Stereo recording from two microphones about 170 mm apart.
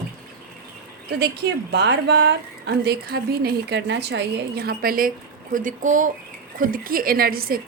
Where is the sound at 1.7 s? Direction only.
85° right.